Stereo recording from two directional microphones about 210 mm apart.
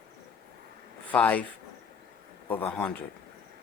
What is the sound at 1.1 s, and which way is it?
Speech, 5° left (ahead or behind).